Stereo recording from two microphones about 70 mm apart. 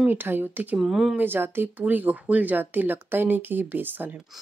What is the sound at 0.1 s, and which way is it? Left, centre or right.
Speech, right.